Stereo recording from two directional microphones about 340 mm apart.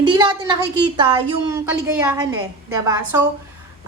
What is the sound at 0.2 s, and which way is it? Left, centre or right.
A woman's voice, centre.